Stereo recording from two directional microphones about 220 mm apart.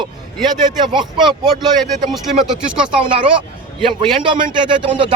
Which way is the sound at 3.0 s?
20° right (ahead or behind).